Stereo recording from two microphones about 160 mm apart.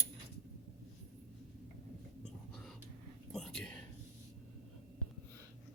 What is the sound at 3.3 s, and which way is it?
Whispering, 5° left (ahead or behind).